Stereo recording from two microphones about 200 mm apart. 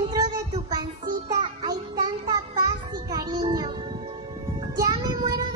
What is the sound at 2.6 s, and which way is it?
Music, 20° right (ahead or behind).